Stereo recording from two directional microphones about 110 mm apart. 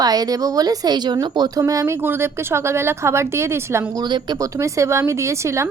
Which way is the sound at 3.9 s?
40° right (ahead or behind).